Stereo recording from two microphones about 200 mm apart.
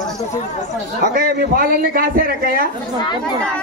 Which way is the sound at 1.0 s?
45° right (ahead or behind).